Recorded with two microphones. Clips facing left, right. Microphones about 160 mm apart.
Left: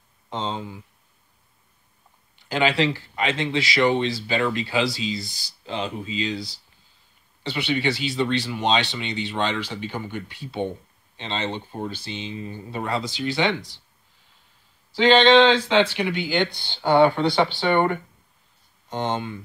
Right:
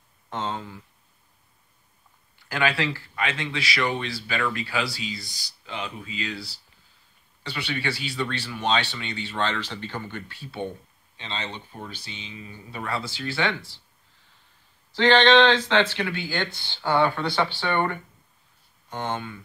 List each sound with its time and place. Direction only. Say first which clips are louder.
0.3 s speech: left 2 dB; 15° left (ahead or behind)
2.3 s speech: left 4 dB; 20° left (ahead or behind)
14.9 s speech: left 2 dB; 10° left (ahead or behind)